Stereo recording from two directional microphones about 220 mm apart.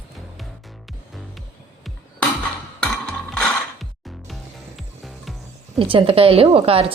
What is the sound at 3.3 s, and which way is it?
Mechanisms, 5° left (ahead or behind).